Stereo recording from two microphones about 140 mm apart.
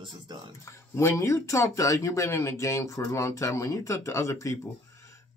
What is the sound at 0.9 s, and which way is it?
Speech, 20° left (ahead or behind).